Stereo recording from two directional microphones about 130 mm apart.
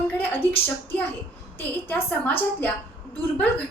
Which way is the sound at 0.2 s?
15° left (ahead or behind).